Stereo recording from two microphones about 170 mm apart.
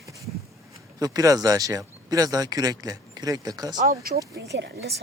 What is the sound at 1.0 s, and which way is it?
Speech, 20° right (ahead or behind).